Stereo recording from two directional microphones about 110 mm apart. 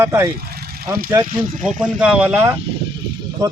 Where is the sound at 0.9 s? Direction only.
40° right (ahead or behind).